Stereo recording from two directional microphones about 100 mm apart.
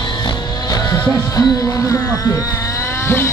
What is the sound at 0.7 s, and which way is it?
Music, 35° left (ahead or behind).